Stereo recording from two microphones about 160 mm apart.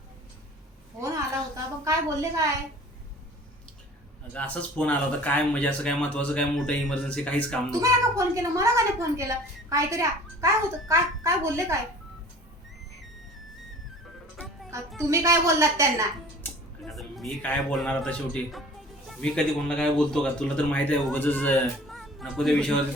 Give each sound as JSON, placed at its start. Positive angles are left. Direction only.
{"t": 1.8, "sound": "a woman's voice", "side_deg": -20}
{"t": 4.4, "sound": "speech", "side_deg": 10}
{"t": 7.7, "sound": "a woman's voice", "side_deg": -20}
{"t": 14.3, "sound": "music", "side_deg": 0}
{"t": 15.1, "sound": "a woman's voice", "side_deg": -20}
{"t": 16.4, "sound": "speech", "side_deg": 0}